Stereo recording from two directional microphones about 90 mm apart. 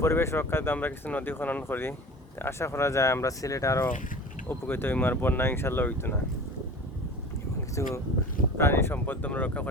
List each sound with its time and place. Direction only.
0.0 s speech: 30° left (ahead or behind)
4.4 s speech: 25° left (ahead or behind)
7.8 s speech: 30° left (ahead or behind)